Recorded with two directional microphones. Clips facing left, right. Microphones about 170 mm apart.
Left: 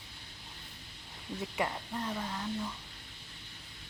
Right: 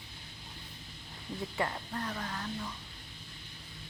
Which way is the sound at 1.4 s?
15° left (ahead or behind).